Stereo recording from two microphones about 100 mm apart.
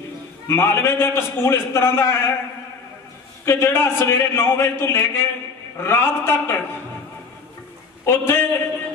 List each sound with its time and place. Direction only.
0.5 s a man's voice: 25° left (ahead or behind)
3.4 s a man's voice: 25° left (ahead or behind)
8.0 s a man's voice: 25° left (ahead or behind)